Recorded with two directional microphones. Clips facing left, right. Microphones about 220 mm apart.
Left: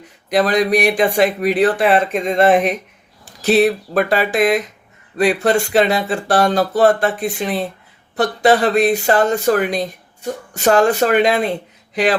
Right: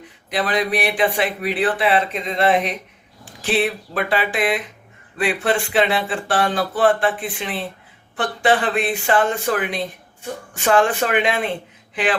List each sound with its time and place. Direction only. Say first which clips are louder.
0.3 s speech: left 6 dB; 45° left (ahead or behind)